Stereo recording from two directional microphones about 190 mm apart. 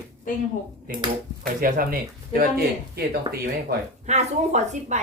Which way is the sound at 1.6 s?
50° right (ahead or behind).